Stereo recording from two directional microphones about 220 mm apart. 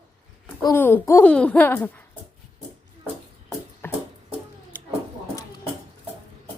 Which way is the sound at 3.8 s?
10° left (ahead or behind).